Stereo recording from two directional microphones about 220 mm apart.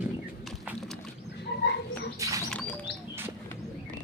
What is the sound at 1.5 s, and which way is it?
Frog, 50° left (ahead or behind).